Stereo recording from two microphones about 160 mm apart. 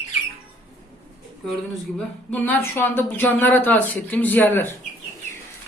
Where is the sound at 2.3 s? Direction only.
10° left (ahead or behind).